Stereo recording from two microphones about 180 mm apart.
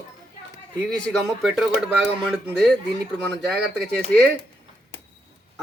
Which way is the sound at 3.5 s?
65° right (ahead or behind).